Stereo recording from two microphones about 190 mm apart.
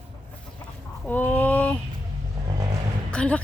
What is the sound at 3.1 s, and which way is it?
Speech, 5° left (ahead or behind).